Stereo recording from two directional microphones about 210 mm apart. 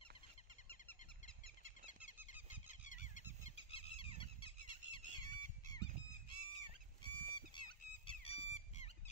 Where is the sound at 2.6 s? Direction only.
35° left (ahead or behind).